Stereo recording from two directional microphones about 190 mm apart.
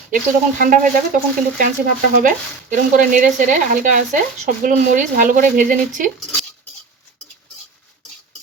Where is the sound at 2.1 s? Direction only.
45° right (ahead or behind).